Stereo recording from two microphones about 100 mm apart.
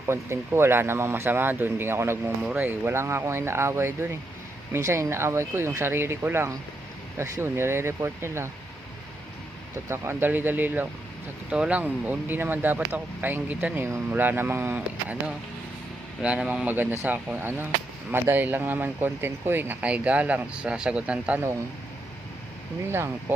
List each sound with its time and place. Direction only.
0.1 s speech: 25° right (ahead or behind)
2.4 s speech: 10° right (ahead or behind)
2.6 s speech: 25° right (ahead or behind)
9.9 s speech: 25° right (ahead or behind)
16.2 s speech: 15° right (ahead or behind)